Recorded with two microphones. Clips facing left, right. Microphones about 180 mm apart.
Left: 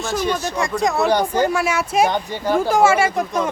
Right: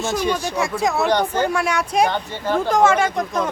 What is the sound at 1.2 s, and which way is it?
Speech, 10° left (ahead or behind).